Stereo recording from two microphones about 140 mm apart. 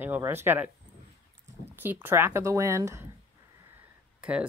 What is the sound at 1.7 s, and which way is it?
Speech, 15° right (ahead or behind).